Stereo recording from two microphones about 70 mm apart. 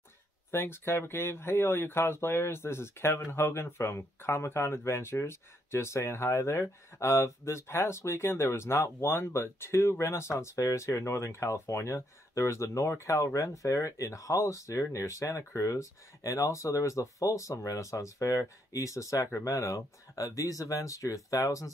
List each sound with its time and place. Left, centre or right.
0.5 s speech: left